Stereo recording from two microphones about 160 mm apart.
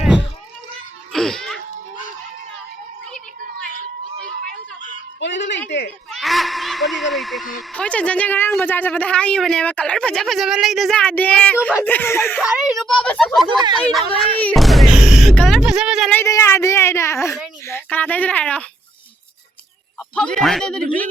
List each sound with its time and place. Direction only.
1.1 s music: centre (ahead or behind)
5.2 s music: 90° left
6.1 s a sound: centre (ahead or behind)
8.5 s speech: 10° left (ahead or behind)
12.4 s speech: 5° right (ahead or behind)
13.5 s speech: 25° right (ahead or behind)
14.3 s speech: 5° left (ahead or behind)
16.0 s speech: 15° left (ahead or behind)
20.1 s speech: 5° left (ahead or behind)